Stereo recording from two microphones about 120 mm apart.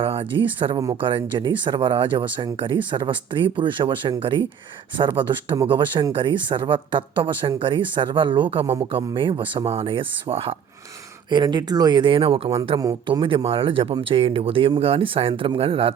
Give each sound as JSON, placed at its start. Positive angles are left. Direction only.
{"t": 0.0, "sound": "speech", "side_deg": -50}
{"t": 11.3, "sound": "speech", "side_deg": -40}